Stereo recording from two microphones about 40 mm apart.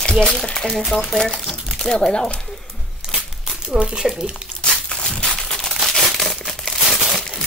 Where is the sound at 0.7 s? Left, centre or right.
Centre.